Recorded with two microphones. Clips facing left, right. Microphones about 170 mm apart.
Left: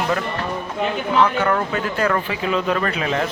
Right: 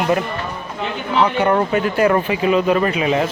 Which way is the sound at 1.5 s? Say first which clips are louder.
Right 5 dB; 25° right (ahead or behind).